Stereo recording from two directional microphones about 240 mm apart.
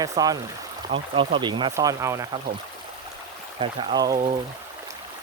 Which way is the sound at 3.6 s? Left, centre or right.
Centre.